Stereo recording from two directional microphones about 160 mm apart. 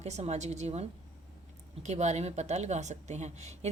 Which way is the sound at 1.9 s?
45° right (ahead or behind).